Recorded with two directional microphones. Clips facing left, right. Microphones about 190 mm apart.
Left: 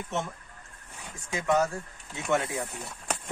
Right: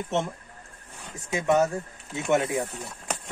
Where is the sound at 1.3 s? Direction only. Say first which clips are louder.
Right 3 dB; 25° right (ahead or behind).